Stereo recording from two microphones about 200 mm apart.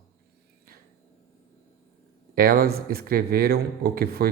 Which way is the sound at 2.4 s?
50° right (ahead or behind).